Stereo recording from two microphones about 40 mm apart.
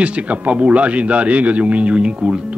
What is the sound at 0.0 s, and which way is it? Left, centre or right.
Speech, right.